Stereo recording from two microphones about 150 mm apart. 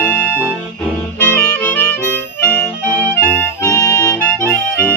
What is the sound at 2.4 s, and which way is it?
Music, 10° left (ahead or behind).